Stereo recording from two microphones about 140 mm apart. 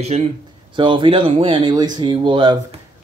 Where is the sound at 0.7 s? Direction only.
35° right (ahead or behind).